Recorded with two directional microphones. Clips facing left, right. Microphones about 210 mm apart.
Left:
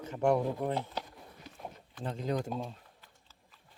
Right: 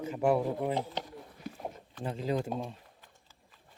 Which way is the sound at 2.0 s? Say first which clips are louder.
Right 2 dB; 5° right (ahead or behind).